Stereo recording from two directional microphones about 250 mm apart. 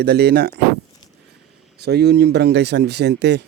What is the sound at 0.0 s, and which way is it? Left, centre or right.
Speech, right.